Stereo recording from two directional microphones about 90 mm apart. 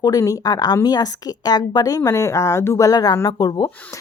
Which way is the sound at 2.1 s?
35° left (ahead or behind).